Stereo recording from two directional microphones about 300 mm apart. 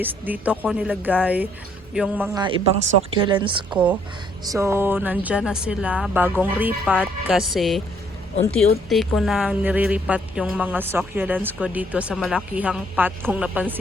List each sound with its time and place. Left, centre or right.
0.0 s a woman's voice: centre
3.7 s a woman's voice: centre
8.9 s a woman's voice: centre